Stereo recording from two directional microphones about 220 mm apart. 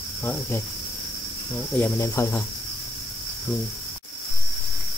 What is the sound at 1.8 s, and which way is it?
Speech, 10° left (ahead or behind).